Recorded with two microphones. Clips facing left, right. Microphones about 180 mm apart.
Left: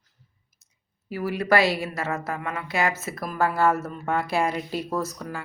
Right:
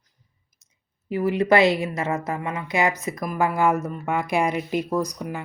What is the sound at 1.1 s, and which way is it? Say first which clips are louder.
A woman's voice: right 4 dB; 20° right (ahead or behind).